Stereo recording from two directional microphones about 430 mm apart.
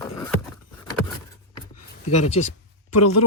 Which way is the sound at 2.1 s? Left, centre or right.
Left.